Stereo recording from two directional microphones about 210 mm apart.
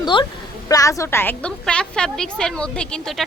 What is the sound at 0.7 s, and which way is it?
A woman's voice, 15° left (ahead or behind).